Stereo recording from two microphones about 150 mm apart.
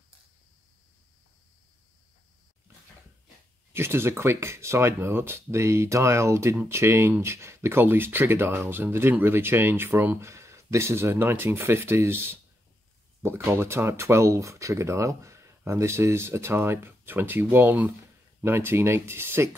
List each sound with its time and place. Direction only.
3.7 s speech: 15° right (ahead or behind)